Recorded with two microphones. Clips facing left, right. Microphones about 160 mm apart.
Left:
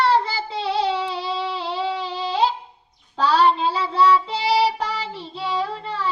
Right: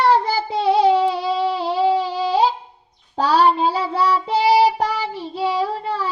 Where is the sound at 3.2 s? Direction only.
45° right (ahead or behind).